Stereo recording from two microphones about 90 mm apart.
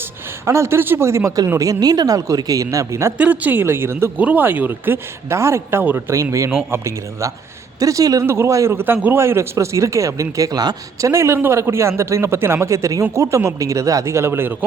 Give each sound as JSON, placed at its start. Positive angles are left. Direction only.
{"t": 0.4, "sound": "a man's voice", "side_deg": -30}
{"t": 3.2, "sound": "a man's voice", "side_deg": -15}
{"t": 11.1, "sound": "a man's voice", "side_deg": -30}